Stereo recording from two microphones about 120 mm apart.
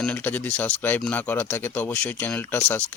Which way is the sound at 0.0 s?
10° left (ahead or behind).